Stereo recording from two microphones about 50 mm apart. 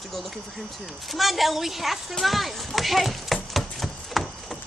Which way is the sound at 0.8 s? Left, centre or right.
Centre.